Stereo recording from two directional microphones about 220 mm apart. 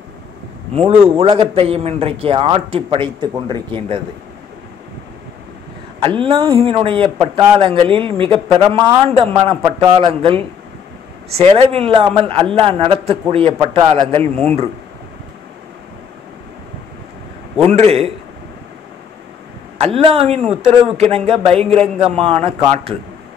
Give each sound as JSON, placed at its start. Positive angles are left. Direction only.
{"t": 1.1, "sound": "a man's voice", "side_deg": -25}
{"t": 5.9, "sound": "a man's voice", "side_deg": -25}
{"t": 13.9, "sound": "speech", "side_deg": 10}
{"t": 17.6, "sound": "a man's voice", "side_deg": -30}
{"t": 19.8, "sound": "a man's voice", "side_deg": -25}